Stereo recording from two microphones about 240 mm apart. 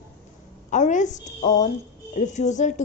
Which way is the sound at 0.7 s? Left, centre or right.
Left.